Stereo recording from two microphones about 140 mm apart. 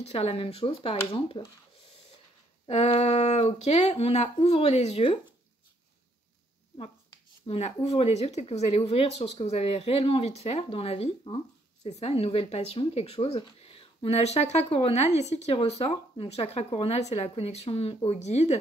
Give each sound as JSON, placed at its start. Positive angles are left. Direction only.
{"t": 0.0, "sound": "speech", "side_deg": 45}
{"t": 2.7, "sound": "speech", "side_deg": 50}
{"t": 7.4, "sound": "speech", "side_deg": 50}